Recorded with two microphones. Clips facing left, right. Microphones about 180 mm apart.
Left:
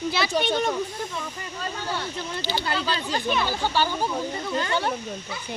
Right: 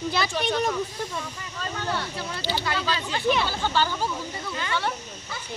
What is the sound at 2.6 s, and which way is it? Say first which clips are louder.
Speech: left 1 dB; 30° left (ahead or behind).